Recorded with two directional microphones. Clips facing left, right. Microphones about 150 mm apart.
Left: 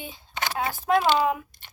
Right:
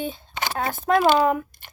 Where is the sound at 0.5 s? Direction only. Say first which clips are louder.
Right 2 dB; 55° right (ahead or behind).